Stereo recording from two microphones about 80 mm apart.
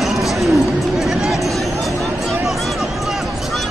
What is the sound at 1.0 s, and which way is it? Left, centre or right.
Music, centre.